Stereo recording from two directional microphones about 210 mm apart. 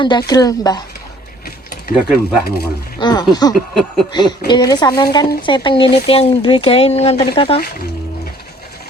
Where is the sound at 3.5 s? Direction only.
Centre (ahead or behind).